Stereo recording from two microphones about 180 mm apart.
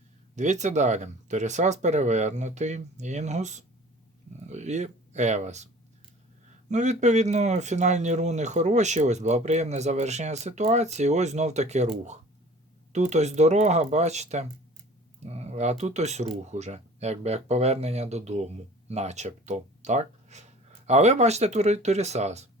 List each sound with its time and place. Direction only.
0.3 s speech: 40° right (ahead or behind)
6.7 s speech: 40° right (ahead or behind)